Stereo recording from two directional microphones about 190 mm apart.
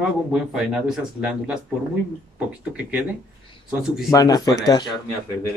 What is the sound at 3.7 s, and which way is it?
Speech, centre (ahead or behind).